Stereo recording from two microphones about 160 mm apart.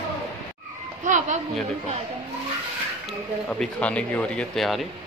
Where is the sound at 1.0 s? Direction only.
50° right (ahead or behind).